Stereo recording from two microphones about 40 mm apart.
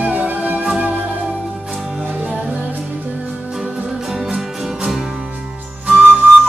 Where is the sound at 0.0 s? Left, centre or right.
Right.